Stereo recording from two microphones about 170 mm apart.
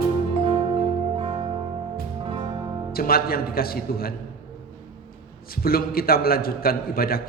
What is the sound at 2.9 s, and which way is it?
A man's voice, 60° left (ahead or behind).